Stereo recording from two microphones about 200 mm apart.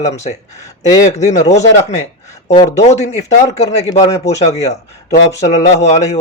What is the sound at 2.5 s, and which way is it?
Speech, 35° left (ahead or behind).